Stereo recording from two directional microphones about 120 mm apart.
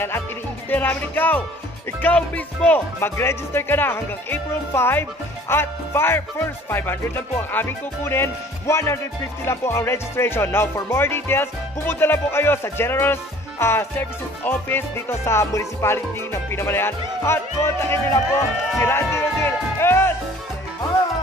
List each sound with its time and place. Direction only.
0.7 s speech: 15° left (ahead or behind)
5.5 s music: 20° left (ahead or behind)